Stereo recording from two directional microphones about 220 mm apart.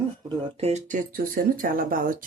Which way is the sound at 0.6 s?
30° right (ahead or behind).